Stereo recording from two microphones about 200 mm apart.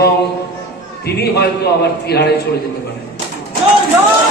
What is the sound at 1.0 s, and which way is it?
A man's voice, 55° left (ahead or behind).